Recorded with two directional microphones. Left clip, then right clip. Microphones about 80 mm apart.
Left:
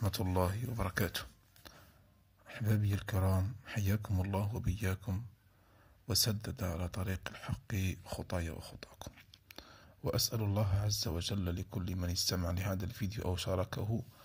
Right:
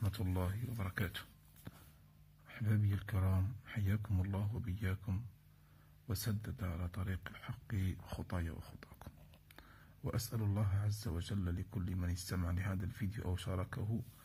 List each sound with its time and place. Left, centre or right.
0.2 s speech: left
2.4 s speech: left
6.0 s speech: left
8.1 s speech: centre
8.4 s speech: left